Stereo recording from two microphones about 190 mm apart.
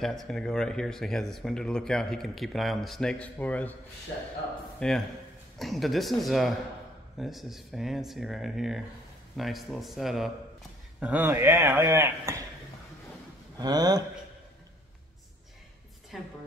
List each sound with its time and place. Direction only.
0.0 s speech: centre (ahead or behind)
4.7 s speech: 5° left (ahead or behind); by 12.4 s 15° right (ahead or behind)
13.6 s speech: 20° right (ahead or behind)
16.1 s speech: centre (ahead or behind)